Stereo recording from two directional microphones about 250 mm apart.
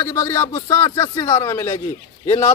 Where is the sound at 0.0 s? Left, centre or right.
Centre.